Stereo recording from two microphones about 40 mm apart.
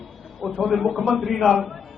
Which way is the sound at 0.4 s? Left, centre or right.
Centre.